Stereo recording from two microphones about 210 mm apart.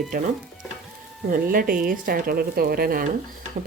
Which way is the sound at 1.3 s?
45° right (ahead or behind).